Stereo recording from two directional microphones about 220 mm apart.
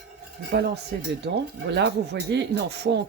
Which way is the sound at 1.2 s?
50° right (ahead or behind).